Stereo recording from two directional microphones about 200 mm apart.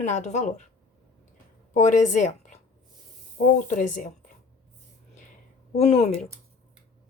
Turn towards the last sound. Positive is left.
turn(degrees=30)  # may be behind; listen again after turning